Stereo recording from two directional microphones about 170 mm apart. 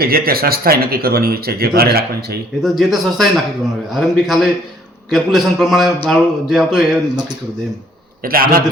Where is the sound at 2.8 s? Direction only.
Centre (ahead or behind).